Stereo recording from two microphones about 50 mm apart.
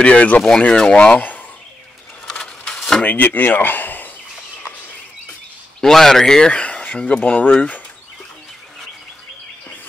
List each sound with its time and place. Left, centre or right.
0.0 s speech: left
2.2 s a sound: centre
3.1 s speech: left
5.8 s a man's voice: centre
6.5 s speech: left